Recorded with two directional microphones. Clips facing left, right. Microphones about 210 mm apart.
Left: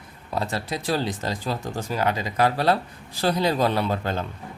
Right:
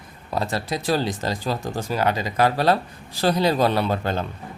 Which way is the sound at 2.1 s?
40° right (ahead or behind).